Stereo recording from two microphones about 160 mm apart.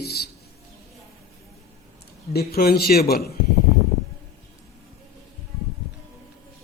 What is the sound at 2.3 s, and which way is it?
Speech, 75° left (ahead or behind).